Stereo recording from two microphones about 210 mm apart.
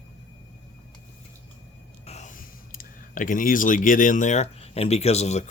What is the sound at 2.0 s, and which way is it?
Speech, 35° left (ahead or behind).